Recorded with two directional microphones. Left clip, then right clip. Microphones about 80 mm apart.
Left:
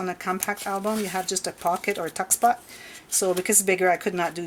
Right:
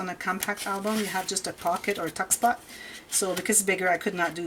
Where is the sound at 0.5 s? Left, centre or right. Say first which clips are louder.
Left 2 dB; centre.